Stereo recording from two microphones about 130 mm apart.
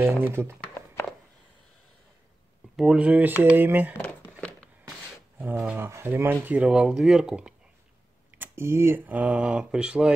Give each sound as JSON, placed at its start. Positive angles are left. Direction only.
{"t": 0.0, "sound": "speech", "side_deg": -20}
{"t": 2.7, "sound": "speech", "side_deg": -5}
{"t": 3.9, "sound": "a sound", "side_deg": 10}
{"t": 5.4, "sound": "speech", "side_deg": -15}
{"t": 8.3, "sound": "speech", "side_deg": -15}